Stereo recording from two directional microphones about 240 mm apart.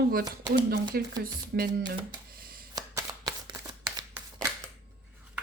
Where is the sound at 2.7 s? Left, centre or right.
Centre.